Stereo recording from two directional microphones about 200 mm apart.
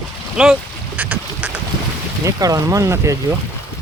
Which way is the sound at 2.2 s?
15° right (ahead or behind).